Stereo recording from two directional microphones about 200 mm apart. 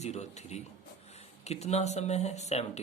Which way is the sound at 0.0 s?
35° left (ahead or behind).